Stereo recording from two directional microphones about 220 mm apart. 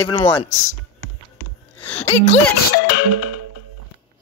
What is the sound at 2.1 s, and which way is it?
Speech, 25° left (ahead or behind).